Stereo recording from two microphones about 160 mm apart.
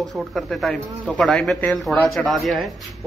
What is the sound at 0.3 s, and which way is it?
Speech, centre (ahead or behind).